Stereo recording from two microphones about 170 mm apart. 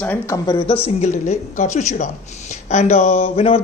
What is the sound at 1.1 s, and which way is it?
Speech, 45° left (ahead or behind).